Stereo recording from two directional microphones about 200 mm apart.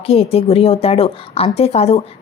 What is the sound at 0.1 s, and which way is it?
A woman's voice, 30° left (ahead or behind).